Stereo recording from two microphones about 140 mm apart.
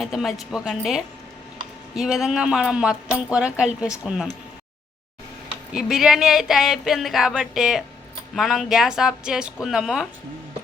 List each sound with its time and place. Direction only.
0.0 s speech: centre (ahead or behind)
5.7 s speech: 5° right (ahead or behind)